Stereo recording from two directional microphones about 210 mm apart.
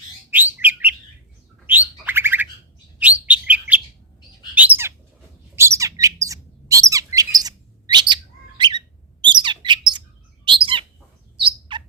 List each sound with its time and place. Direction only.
0.3 s bird: 10° right (ahead or behind)
3.0 s chirp: 5° right (ahead or behind)
4.5 s bird: 10° right (ahead or behind); by 11.8 s 25° right (ahead or behind)